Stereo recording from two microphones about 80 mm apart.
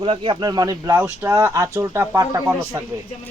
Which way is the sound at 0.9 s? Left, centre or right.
Right.